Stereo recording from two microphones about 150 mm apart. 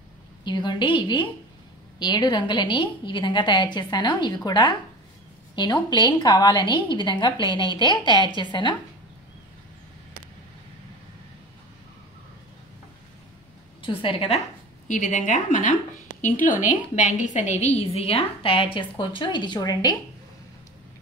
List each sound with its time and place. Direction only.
0.5 s a woman's voice: 30° left (ahead or behind)
13.8 s a woman's voice: 35° left (ahead or behind)
14.9 s a woman's voice: 55° left (ahead or behind); by 20.0 s 25° left (ahead or behind)